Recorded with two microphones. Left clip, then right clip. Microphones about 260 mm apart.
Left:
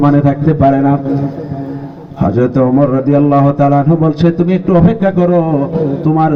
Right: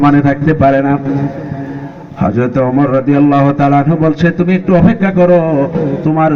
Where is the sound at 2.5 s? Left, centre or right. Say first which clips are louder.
Even; left.